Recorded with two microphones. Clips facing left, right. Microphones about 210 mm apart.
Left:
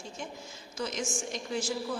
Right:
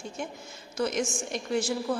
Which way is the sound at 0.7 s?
60° right (ahead or behind).